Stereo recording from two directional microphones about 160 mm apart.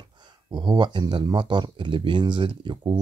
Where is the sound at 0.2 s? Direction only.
25° right (ahead or behind).